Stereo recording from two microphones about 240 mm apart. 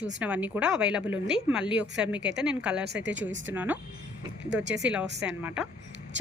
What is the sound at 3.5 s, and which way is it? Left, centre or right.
Speech, centre.